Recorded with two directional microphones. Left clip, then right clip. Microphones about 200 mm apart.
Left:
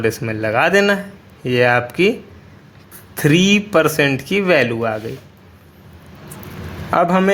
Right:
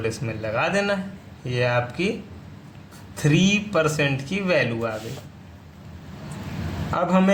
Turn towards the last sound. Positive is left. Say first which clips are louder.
# left 7 dB
turn(degrees=45)  # may be behind; listen again after turning